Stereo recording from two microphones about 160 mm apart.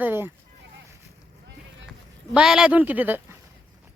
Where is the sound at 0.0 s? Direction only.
15° right (ahead or behind).